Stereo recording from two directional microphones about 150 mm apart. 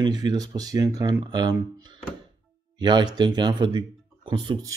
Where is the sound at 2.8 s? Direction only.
30° right (ahead or behind).